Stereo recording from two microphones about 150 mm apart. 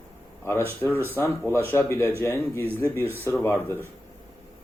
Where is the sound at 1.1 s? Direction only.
15° left (ahead or behind).